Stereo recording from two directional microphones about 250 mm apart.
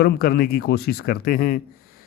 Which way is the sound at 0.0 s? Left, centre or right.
Left.